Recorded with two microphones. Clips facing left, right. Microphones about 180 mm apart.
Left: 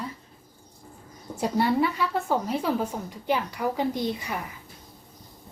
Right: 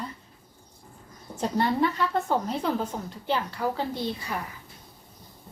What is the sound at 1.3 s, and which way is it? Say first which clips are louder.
A woman's voice: left 2 dB; 10° left (ahead or behind).